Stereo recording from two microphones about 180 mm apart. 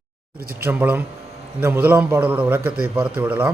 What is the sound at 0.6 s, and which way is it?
A man's voice, 10° right (ahead or behind).